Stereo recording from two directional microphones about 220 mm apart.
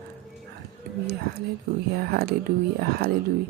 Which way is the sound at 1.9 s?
45° right (ahead or behind).